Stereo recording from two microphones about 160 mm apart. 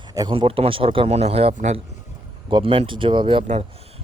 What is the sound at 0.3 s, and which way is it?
Speech, 35° right (ahead or behind).